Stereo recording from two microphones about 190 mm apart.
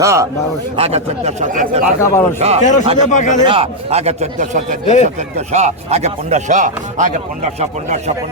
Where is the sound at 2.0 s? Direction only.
15° left (ahead or behind).